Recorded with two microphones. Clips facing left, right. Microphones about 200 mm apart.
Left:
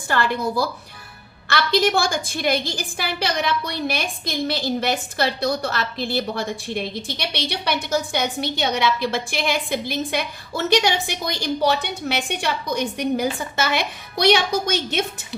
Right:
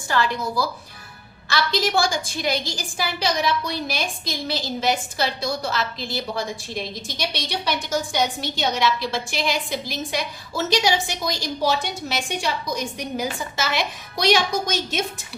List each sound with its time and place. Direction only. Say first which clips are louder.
0.1 s a woman's voice: left 2 dB; 55° left (ahead or behind)